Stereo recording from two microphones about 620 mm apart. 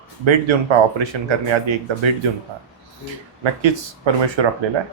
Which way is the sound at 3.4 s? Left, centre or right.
Right.